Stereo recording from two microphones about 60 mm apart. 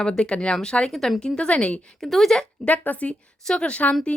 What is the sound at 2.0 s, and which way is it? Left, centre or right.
Speech, centre.